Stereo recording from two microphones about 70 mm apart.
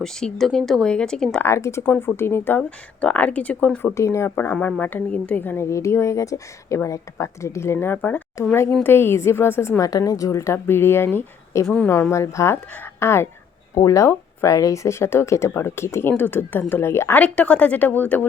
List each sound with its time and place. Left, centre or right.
0.0 s speech: centre
1.5 s speech: left
1.8 s speech: left
2.6 s speech: centre
3.9 s speech: left
4.6 s speech: left
5.6 s speech: left
9.8 s speech: left
12.1 s speech: left
13.8 s speech: left
17.2 s speech: centre